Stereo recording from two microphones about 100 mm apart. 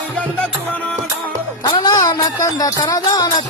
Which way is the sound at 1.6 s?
45° left (ahead or behind).